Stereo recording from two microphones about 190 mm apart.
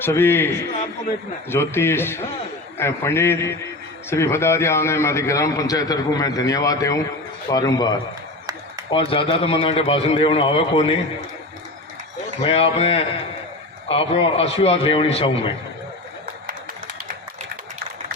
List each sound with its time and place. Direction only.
0.0 s a man's voice: 10° left (ahead or behind); by 10.9 s 30° left (ahead or behind)
12.4 s a man's voice: 30° left (ahead or behind)